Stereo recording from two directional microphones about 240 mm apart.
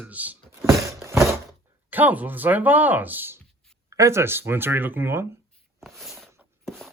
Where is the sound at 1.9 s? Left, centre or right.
Centre.